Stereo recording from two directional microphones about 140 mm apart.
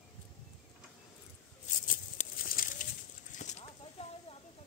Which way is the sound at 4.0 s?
50° left (ahead or behind).